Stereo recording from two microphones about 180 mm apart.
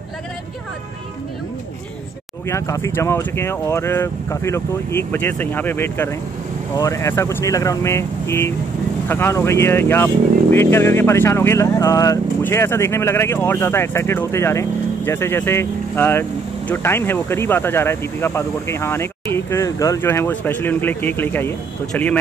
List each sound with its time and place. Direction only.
2.4 s speech: 15° left (ahead or behind)